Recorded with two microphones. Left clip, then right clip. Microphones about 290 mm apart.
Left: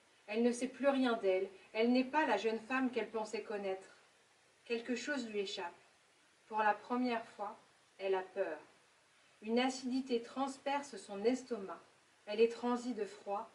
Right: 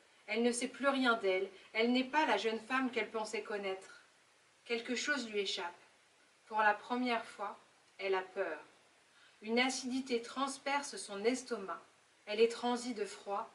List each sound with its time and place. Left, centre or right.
0.3 s speech: centre